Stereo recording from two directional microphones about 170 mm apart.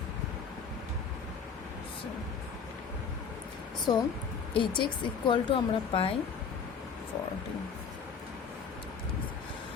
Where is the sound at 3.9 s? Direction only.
25° left (ahead or behind).